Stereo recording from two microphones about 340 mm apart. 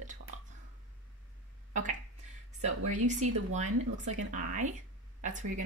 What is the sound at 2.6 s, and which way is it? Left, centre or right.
Speech, right.